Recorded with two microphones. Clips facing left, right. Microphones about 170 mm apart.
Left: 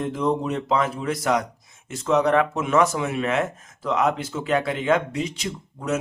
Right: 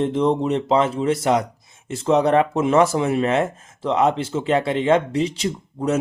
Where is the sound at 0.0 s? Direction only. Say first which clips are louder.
Right 5 dB; 25° right (ahead or behind).